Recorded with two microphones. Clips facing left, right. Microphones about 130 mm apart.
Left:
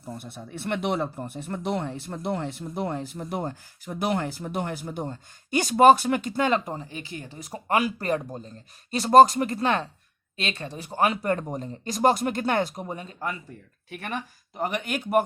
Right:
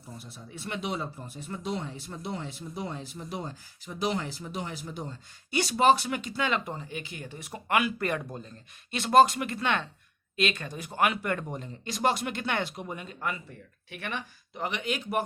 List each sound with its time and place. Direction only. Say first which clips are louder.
0.2 s speech: left 6 dB; 60° left (ahead or behind)